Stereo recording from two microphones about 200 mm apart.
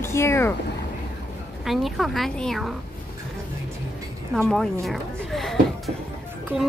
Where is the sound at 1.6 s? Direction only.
Centre (ahead or behind).